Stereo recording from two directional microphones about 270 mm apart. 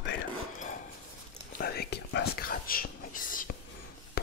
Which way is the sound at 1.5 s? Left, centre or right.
Left.